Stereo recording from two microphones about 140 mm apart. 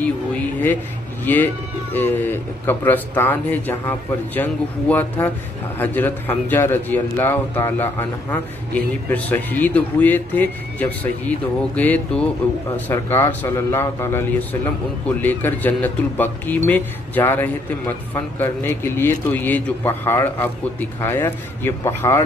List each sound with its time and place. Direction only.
0.0 s a man's voice: 10° left (ahead or behind)